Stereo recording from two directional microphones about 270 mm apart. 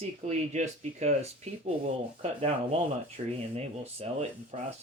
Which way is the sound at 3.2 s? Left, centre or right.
Right.